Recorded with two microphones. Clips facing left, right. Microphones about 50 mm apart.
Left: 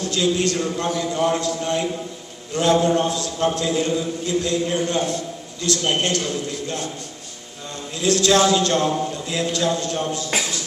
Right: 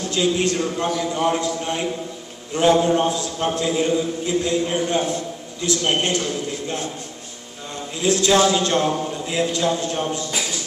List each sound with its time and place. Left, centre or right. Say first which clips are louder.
0.1 s a man's voice: right 1 dB; right
7.7 s a sound: even; centre
8.4 s a man's voice: even; centre